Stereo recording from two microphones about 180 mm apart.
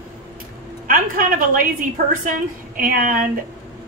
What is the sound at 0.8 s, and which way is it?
A woman's voice, 50° right (ahead or behind).